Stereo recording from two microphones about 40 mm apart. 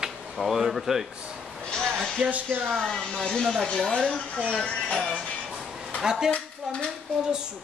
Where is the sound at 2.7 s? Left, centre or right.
Centre.